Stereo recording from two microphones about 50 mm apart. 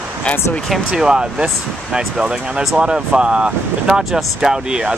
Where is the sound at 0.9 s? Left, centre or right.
Centre.